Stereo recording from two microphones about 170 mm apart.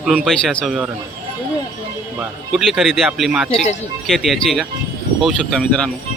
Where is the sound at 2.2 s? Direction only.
Centre (ahead or behind).